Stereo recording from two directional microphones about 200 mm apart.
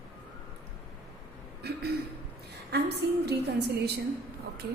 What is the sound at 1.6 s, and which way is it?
A woman's voice, 55° right (ahead or behind).